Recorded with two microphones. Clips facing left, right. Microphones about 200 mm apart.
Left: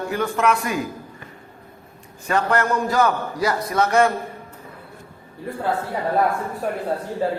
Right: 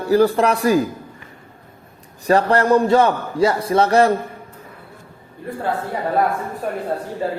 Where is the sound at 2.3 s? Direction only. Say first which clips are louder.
Right 6 dB; 35° right (ahead or behind).